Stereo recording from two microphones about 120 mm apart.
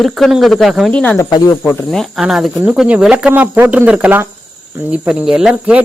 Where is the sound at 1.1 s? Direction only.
25° left (ahead or behind).